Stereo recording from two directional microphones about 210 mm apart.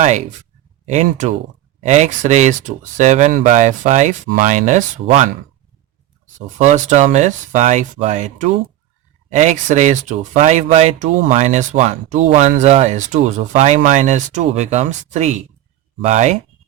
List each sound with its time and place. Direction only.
0.0 s speech: 35° right (ahead or behind)
6.6 s speech: 35° right (ahead or behind)